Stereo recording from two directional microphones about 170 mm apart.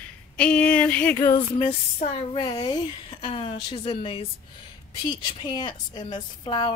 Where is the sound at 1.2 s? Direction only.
25° left (ahead or behind).